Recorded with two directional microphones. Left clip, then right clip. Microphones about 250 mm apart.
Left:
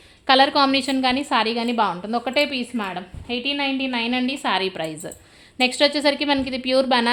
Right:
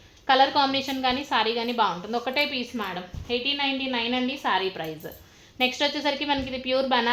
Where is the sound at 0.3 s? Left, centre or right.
Left.